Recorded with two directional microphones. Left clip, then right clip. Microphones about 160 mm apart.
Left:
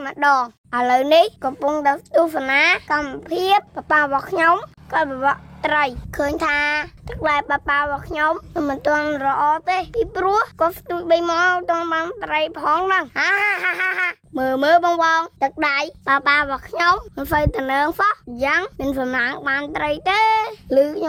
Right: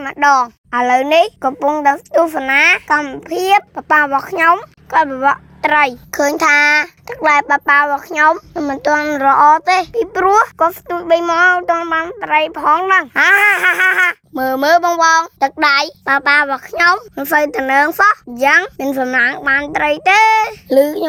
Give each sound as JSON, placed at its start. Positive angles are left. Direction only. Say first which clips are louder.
{"t": 0.1, "sound": "a child's voice", "louder": "right 5 dB", "side_deg": -20}
{"t": 1.4, "sound": "a child's voice", "louder": "right 6 dB", "side_deg": -25}
{"t": 7.1, "sound": "a child's voice", "louder": "right 7 dB", "side_deg": -25}
{"t": 9.1, "sound": "a child's voice", "louder": "right 9 dB", "side_deg": -40}
{"t": 10.6, "sound": "a child's voice", "louder": "right 5 dB", "side_deg": -25}
{"t": 13.1, "sound": "a child's voice", "louder": "right 8 dB", "side_deg": -45}
{"t": 14.3, "sound": "a child's voice", "louder": "right 2 dB", "side_deg": -15}
{"t": 18.3, "sound": "a child's voice", "louder": "right 5 dB", "side_deg": -45}
{"t": 18.6, "sound": "a child's voice", "louder": "right 5 dB", "side_deg": -30}
{"t": 20.2, "sound": "child singing", "louder": "right 6 dB", "side_deg": 0}
{"t": 20.7, "sound": "a child's voice", "louder": "right 4 dB", "side_deg": -30}